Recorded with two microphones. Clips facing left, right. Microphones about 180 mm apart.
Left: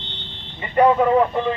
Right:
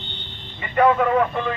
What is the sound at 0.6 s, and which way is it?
Speech, 30° left (ahead or behind).